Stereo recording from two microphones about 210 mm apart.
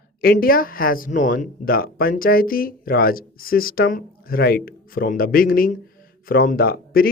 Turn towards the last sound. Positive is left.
turn(degrees=45)  # may be behind; listen again after turning